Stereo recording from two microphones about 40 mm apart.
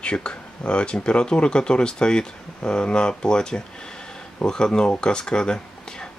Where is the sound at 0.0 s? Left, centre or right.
Left.